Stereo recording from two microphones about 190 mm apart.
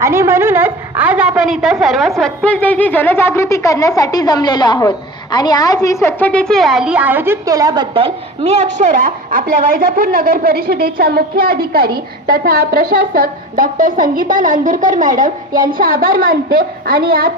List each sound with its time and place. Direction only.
0.0 s a woman's voice: 15° right (ahead or behind); by 17.3 s 50° right (ahead or behind)